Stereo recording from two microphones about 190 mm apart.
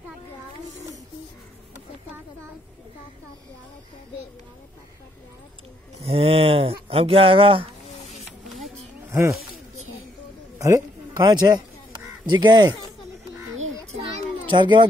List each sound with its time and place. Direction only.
6.0 s a sound: 30° right (ahead or behind)
6.9 s speech: 30° right (ahead or behind)
10.6 s speech: 20° right (ahead or behind)
13.5 s music: 90° right
14.5 s speech: 25° right (ahead or behind)